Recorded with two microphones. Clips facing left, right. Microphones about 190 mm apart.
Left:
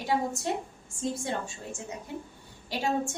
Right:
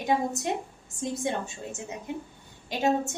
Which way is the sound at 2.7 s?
20° right (ahead or behind).